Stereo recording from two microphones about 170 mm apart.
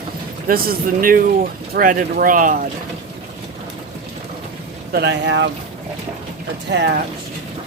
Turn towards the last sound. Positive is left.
turn(degrees=-80)